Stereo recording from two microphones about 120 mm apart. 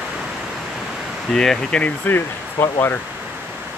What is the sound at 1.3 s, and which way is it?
Speech, 5° left (ahead or behind).